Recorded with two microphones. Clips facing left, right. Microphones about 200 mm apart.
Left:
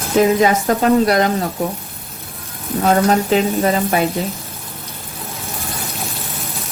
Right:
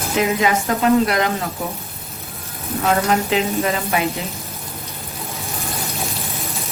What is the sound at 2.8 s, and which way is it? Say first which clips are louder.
A woman's voice: left 4 dB; 40° left (ahead or behind).